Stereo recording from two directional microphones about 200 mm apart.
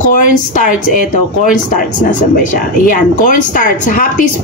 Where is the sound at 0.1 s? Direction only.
40° left (ahead or behind).